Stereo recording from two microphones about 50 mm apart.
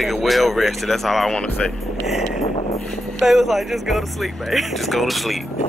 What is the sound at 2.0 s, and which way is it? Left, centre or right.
Speech, centre.